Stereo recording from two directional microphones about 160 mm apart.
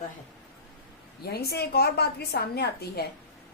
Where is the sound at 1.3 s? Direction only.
80° left.